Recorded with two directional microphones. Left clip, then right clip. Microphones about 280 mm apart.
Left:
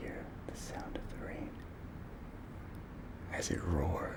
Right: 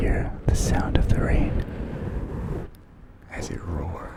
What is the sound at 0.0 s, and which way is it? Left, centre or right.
Whispering, right.